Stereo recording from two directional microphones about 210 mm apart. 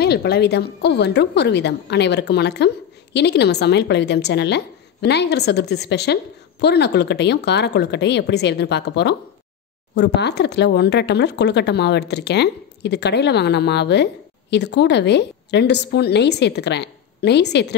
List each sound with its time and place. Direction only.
0.0 s a woman's voice: 50° left (ahead or behind)